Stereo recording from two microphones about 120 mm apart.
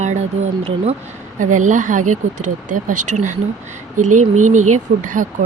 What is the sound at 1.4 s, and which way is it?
Speech, 90° right.